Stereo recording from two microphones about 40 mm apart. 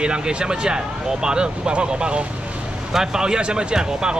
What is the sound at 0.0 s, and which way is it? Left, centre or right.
Speech, right.